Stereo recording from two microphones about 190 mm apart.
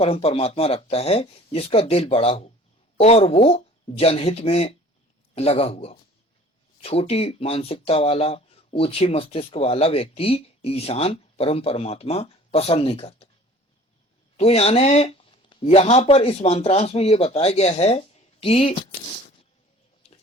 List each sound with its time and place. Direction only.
0.0 s speech: 30° left (ahead or behind)
14.3 s speech: 30° left (ahead or behind)